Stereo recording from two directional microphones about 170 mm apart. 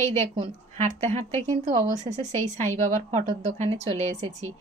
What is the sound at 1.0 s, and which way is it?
A woman's voice, 40° right (ahead or behind).